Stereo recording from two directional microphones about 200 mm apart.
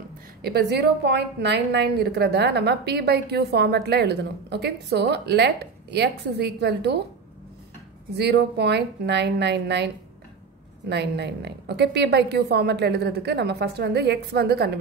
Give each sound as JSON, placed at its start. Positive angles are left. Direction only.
{"t": 0.4, "sound": "a woman's voice", "side_deg": -55}
{"t": 8.1, "sound": "a woman's voice", "side_deg": -55}
{"t": 10.9, "sound": "a woman's voice", "side_deg": -55}